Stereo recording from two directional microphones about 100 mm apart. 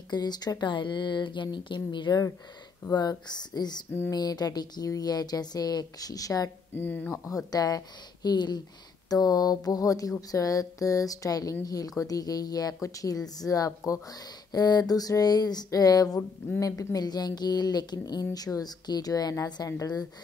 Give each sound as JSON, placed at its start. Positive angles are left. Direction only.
{"t": 0.1, "sound": "speech", "side_deg": 45}
{"t": 6.7, "sound": "speech", "side_deg": 20}
{"t": 7.2, "sound": "speech", "side_deg": 35}